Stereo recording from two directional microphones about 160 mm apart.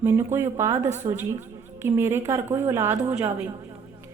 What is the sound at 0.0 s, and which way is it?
Speech, 15° right (ahead or behind).